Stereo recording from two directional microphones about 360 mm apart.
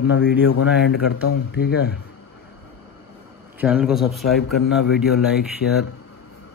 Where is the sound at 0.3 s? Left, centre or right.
Left.